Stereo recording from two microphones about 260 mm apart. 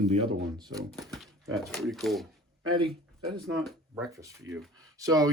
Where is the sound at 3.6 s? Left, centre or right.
Centre.